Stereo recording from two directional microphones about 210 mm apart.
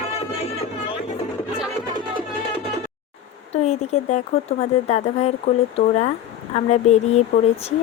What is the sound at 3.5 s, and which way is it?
Speech, 30° left (ahead or behind).